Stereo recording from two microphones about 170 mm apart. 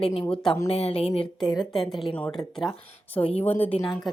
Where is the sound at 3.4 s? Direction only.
10° left (ahead or behind).